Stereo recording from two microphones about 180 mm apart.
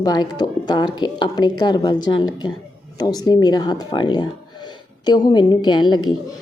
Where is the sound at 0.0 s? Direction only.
20° left (ahead or behind).